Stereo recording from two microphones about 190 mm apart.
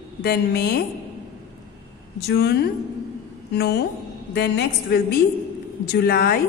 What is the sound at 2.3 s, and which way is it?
A woman's voice, 60° left (ahead or behind).